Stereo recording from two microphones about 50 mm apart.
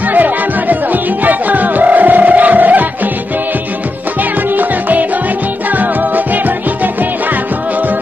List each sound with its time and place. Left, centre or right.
0.1 s music: right
4.6 s music: right